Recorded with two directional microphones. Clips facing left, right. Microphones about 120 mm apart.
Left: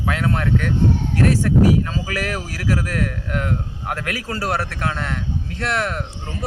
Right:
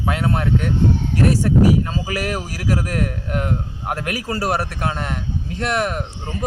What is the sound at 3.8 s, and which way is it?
Speech, 15° right (ahead or behind).